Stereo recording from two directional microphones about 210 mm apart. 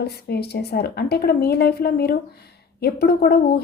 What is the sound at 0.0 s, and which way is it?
A woman's voice, 50° left (ahead or behind).